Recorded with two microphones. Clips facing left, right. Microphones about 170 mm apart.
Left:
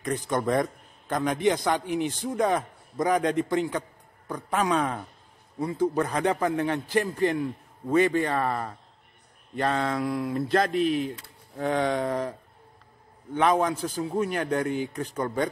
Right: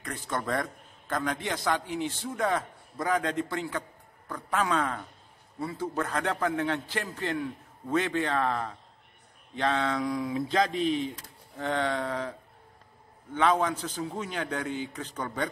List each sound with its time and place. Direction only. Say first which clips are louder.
0.0 s a man's voice: left 7 dB; 15° left (ahead or behind)